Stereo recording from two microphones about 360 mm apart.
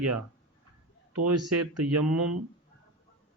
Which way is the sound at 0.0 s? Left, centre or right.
Right.